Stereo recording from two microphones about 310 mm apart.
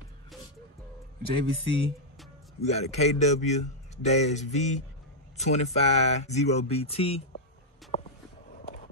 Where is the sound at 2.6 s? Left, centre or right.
Left.